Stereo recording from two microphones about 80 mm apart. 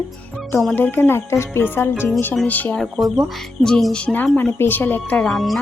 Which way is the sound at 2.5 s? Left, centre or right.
Left.